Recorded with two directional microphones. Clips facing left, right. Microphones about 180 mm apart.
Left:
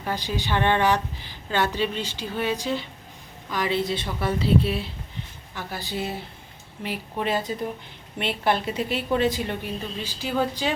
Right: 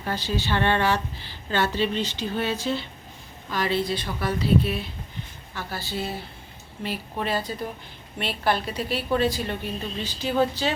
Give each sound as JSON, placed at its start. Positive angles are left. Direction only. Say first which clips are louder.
{"t": 0.0, "sound": "a woman's voice", "louder": "right 1 dB", "side_deg": 15}
{"t": 5.5, "sound": "a woman's voice", "louder": "even", "side_deg": 15}